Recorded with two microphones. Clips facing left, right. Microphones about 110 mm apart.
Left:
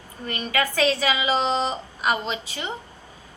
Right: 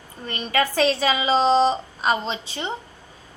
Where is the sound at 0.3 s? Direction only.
30° right (ahead or behind).